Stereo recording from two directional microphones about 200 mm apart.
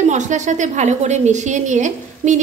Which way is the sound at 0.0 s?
35° right (ahead or behind).